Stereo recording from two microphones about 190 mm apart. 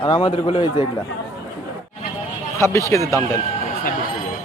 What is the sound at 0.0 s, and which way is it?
Speech, 25° left (ahead or behind).